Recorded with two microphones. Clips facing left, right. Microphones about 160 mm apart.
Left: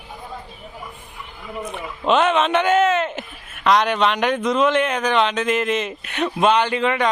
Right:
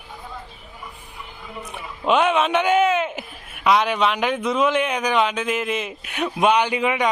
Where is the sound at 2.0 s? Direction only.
10° right (ahead or behind).